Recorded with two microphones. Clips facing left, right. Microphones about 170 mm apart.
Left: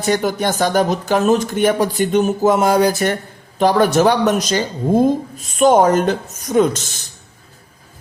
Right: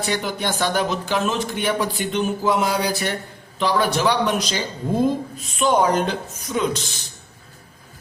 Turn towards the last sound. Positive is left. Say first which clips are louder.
# left 8 dB
turn(degrees=45)  # may be behind; listen again after turning